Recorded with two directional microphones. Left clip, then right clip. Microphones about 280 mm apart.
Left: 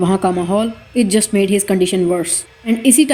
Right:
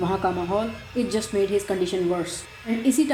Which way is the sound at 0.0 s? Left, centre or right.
Left.